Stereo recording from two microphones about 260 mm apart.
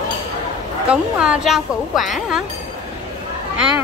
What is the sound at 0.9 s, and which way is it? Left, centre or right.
Speech, centre.